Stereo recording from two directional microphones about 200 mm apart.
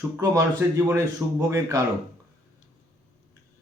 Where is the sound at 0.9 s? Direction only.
15° right (ahead or behind).